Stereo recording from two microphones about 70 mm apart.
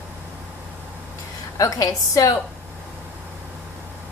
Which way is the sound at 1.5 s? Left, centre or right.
Left.